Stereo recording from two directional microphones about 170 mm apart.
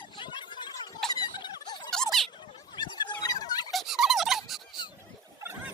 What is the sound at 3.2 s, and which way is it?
Turkey, 20° left (ahead or behind).